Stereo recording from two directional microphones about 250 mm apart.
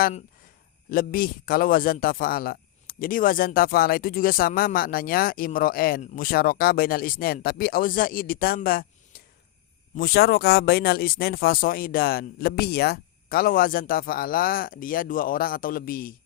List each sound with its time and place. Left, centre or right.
0.9 s a man's voice: left